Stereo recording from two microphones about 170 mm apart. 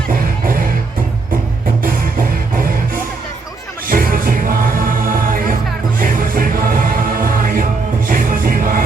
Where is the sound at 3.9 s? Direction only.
55° right (ahead or behind).